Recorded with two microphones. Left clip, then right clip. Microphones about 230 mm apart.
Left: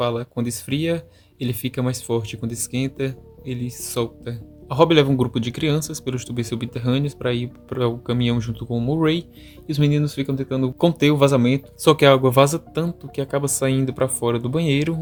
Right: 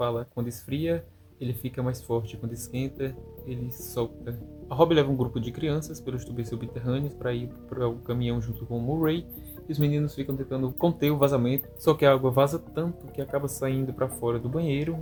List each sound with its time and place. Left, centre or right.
0.0 s speech: left